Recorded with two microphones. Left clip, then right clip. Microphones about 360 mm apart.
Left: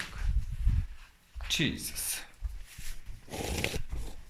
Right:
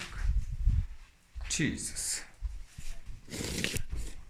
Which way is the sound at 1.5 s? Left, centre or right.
Centre.